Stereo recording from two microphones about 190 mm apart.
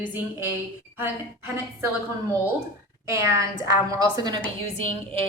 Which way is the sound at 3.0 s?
15° right (ahead or behind).